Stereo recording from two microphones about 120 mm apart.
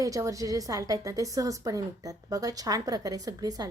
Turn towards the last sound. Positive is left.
turn(degrees=-30)  # may be behind; listen again after turning